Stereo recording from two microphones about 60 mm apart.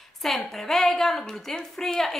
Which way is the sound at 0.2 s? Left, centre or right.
Centre.